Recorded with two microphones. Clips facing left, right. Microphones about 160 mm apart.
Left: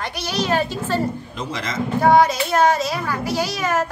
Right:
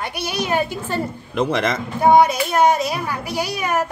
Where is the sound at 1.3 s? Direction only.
60° right (ahead or behind).